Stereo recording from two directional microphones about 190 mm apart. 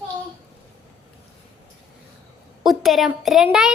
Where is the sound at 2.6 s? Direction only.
Centre (ahead or behind).